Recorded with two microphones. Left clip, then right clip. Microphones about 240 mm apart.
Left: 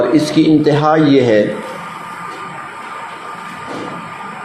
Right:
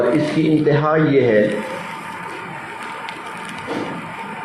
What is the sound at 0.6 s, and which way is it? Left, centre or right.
Speech, left.